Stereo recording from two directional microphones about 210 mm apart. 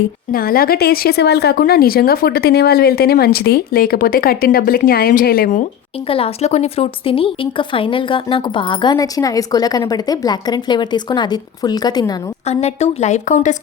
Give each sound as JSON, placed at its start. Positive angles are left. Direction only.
{"t": 0.3, "sound": "speech", "side_deg": 45}
{"t": 6.1, "sound": "speech", "side_deg": 25}
{"t": 12.5, "sound": "a woman's voice", "side_deg": 30}